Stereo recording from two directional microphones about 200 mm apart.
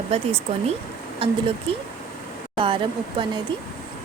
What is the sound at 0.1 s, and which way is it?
Speech, 30° right (ahead or behind).